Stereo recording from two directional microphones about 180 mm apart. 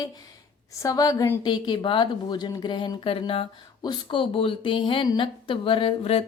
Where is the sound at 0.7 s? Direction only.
15° left (ahead or behind).